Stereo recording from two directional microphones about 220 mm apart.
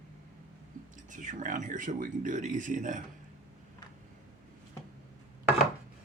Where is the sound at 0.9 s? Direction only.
35° right (ahead or behind).